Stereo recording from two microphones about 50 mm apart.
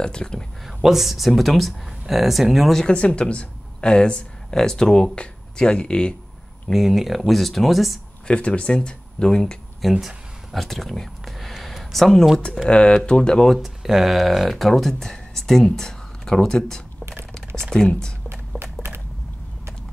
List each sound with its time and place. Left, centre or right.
0.0 s speech: centre
0.8 s speech: centre
2.8 s speech: left
6.7 s speech: centre
8.3 s speech: left
9.8 s a sound: centre
12.6 s speech: left
13.5 s speech: centre